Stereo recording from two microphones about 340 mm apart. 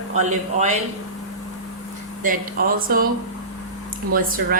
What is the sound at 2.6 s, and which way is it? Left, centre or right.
Speech, right.